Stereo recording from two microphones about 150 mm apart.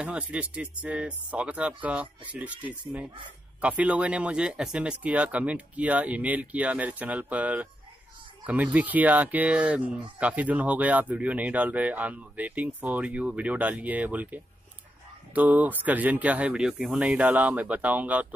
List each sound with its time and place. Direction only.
0.0 s speech: 10° right (ahead or behind)